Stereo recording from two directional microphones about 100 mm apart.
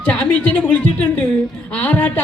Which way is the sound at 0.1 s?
15° left (ahead or behind).